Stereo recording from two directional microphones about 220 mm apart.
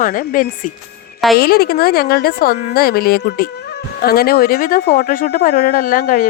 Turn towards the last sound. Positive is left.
turn(degrees=40)  # may be behind; listen again after turning